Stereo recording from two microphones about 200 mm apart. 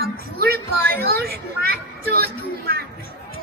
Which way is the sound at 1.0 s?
50° right (ahead or behind).